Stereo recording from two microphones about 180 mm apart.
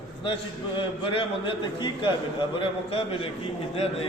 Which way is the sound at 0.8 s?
30° left (ahead or behind).